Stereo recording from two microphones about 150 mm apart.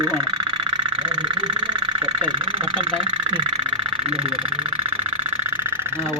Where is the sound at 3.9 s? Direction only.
40° right (ahead or behind).